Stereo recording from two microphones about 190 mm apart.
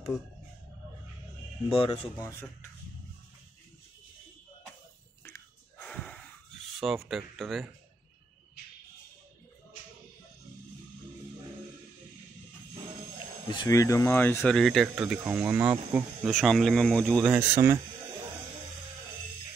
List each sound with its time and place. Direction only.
1.7 s speech: 30° left (ahead or behind)
5.2 s whispering: 10° left (ahead or behind)
6.8 s speech: centre (ahead or behind)
13.5 s speech: 20° left (ahead or behind); by 16.0 s 10° right (ahead or behind)
16.3 s speech: centre (ahead or behind)
17.3 s speech: 15° right (ahead or behind)